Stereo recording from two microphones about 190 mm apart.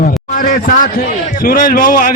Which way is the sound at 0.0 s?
45° left (ahead or behind).